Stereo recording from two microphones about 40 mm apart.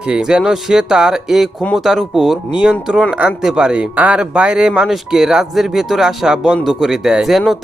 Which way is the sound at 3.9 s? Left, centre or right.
Right.